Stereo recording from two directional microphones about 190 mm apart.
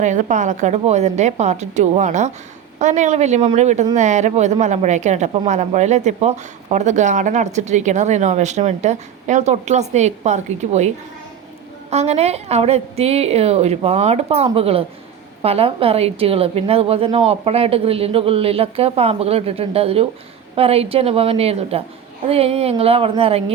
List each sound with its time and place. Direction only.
0.0 s speech: 40° right (ahead or behind)